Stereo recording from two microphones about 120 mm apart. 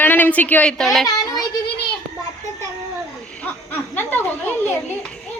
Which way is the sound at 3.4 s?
15° left (ahead or behind).